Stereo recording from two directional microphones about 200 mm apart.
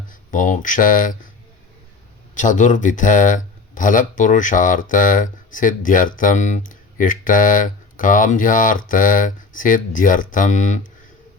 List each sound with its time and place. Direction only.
0.1 s speech: 40° left (ahead or behind)
2.3 s speech: 40° left (ahead or behind)